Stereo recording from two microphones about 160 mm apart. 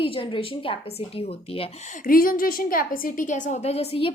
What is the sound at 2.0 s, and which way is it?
A woman's voice, 60° left (ahead or behind).